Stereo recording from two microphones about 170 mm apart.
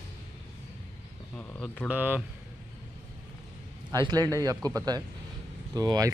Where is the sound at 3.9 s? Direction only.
25° right (ahead or behind).